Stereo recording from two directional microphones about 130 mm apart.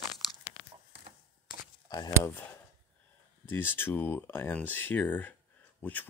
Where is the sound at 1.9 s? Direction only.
25° left (ahead or behind).